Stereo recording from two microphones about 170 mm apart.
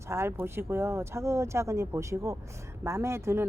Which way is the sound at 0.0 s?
15° right (ahead or behind).